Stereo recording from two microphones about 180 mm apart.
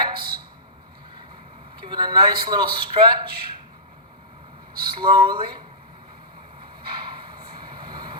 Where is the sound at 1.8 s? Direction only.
25° right (ahead or behind).